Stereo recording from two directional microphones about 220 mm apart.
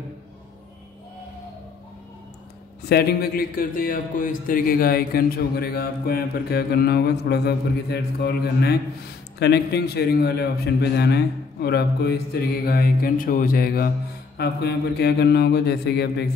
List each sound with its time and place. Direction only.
2.9 s a man's voice: 45° left (ahead or behind)